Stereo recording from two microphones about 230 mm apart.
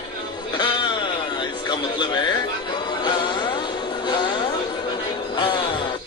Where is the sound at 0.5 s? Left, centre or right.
Left.